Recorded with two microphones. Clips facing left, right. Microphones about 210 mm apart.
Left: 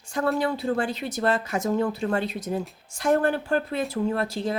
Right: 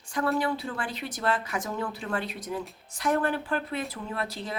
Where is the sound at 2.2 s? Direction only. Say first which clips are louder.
Left 6 dB; 25° left (ahead or behind).